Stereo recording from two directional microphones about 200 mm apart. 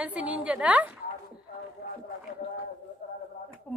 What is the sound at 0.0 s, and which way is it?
Speech, 5° right (ahead or behind).